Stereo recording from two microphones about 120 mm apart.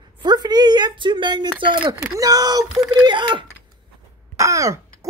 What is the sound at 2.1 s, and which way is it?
Speech, 30° right (ahead or behind).